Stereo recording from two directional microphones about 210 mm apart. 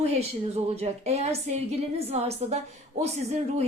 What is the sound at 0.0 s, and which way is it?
A woman's voice, 30° right (ahead or behind).